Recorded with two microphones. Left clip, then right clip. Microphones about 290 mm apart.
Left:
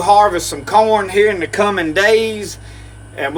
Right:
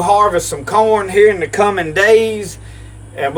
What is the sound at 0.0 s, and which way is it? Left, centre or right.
Speech, centre.